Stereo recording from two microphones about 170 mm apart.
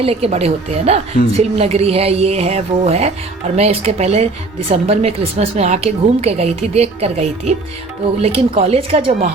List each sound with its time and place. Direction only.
0.0 s speech: 35° right (ahead or behind)